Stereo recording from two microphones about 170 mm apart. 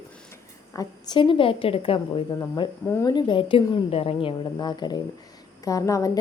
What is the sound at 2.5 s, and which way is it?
A woman's voice, 20° left (ahead or behind).